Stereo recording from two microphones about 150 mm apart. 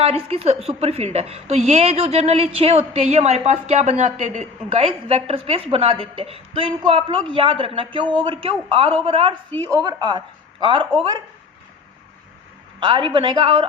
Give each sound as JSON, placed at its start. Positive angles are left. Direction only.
{"t": 0.0, "sound": "a woman's voice", "side_deg": -40}
{"t": 9.7, "sound": "speech", "side_deg": -30}
{"t": 12.8, "sound": "a man's voice", "side_deg": -35}